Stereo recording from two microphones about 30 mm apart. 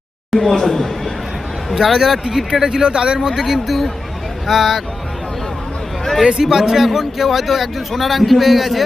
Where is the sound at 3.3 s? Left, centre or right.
Centre.